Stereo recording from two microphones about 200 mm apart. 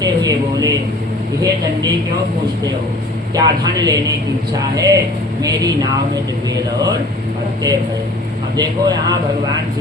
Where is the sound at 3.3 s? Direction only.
20° right (ahead or behind).